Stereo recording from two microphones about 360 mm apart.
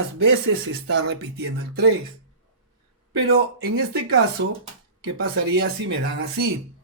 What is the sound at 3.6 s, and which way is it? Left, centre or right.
Speech, right.